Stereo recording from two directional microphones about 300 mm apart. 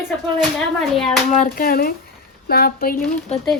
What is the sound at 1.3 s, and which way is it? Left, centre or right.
Speech, left.